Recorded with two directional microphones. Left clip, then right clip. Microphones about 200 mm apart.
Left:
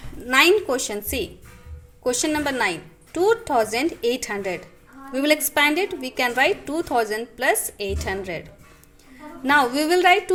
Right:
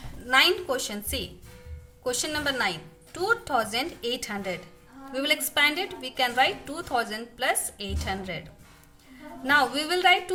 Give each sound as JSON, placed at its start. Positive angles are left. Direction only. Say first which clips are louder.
{"t": 0.3, "sound": "a woman's voice", "louder": "left 5 dB", "side_deg": 20}